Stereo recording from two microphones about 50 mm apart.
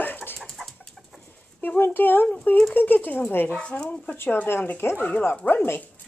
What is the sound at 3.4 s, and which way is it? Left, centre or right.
Speech, left.